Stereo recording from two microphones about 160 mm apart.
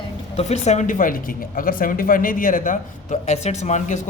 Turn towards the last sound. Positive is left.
turn(degrees=50)  # may be behind; listen again after turning